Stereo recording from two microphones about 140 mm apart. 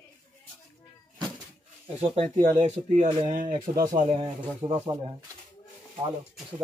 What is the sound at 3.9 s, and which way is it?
Speech, 50° right (ahead or behind).